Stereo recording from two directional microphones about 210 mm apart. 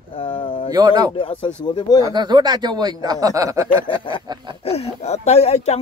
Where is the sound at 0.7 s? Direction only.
20° right (ahead or behind).